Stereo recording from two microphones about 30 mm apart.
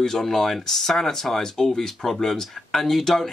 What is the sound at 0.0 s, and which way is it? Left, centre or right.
Speech, centre.